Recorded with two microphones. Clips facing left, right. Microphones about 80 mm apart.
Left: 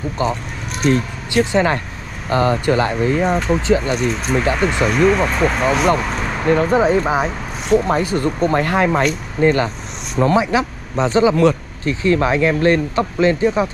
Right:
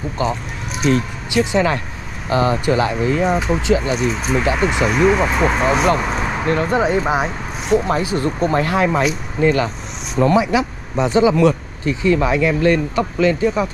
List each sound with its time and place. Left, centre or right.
0.8 s speech: left
3.3 s speech: centre
3.6 s speech: left
3.9 s speech: centre
7.9 s speech: left
11.3 s speech: left